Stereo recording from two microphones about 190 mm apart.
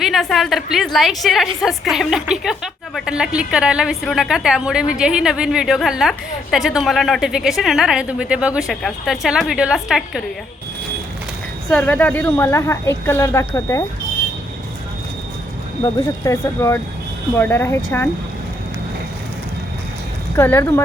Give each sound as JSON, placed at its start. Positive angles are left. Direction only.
{"t": 0.0, "sound": "a woman's voice", "side_deg": 0}
{"t": 11.7, "sound": "a woman's voice", "side_deg": 10}
{"t": 15.8, "sound": "a woman's voice", "side_deg": 15}
{"t": 20.3, "sound": "a woman's voice", "side_deg": 10}